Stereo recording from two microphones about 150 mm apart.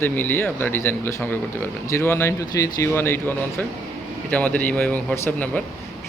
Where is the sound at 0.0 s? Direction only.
15° left (ahead or behind).